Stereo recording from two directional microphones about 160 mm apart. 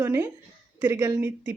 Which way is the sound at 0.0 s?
15° right (ahead or behind).